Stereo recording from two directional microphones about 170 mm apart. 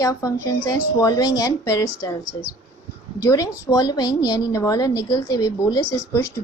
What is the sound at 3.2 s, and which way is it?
A woman's voice, 20° left (ahead or behind).